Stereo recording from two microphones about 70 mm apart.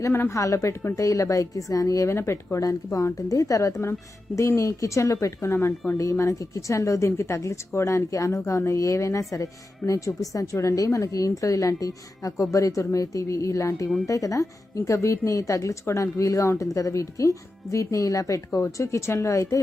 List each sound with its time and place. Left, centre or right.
0.3 s a woman's voice: left
2.1 s a woman's voice: left
5.5 s speech: left
6.0 s a woman's voice: left